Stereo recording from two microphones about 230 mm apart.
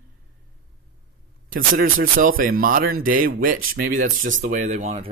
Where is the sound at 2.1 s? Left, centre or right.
Right.